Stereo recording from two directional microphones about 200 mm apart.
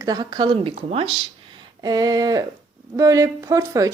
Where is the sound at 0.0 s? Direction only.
20° right (ahead or behind).